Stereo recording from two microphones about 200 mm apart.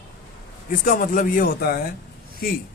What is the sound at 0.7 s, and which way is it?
Speech, 45° left (ahead or behind).